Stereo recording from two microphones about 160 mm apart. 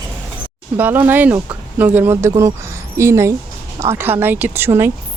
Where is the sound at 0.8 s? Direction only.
10° right (ahead or behind).